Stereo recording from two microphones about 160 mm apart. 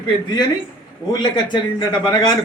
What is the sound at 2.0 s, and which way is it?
Speech, 25° left (ahead or behind).